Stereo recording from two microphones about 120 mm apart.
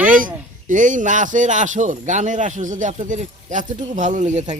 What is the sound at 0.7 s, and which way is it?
Speech, 90° right.